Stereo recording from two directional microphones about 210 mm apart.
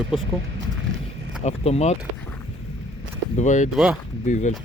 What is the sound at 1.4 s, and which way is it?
Speech, 30° left (ahead or behind).